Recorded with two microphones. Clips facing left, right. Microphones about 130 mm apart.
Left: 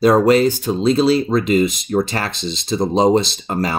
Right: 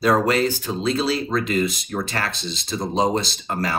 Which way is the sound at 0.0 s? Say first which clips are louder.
Left 6 dB; 20° left (ahead or behind).